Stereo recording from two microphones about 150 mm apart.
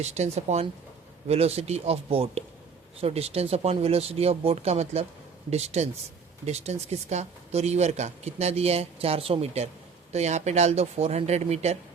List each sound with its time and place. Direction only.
0.0 s speech: 50° right (ahead or behind)